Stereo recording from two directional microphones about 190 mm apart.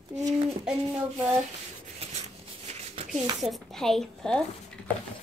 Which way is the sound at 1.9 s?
35° right (ahead or behind).